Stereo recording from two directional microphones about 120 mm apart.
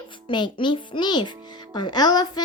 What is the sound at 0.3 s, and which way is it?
A woman's voice, 40° left (ahead or behind).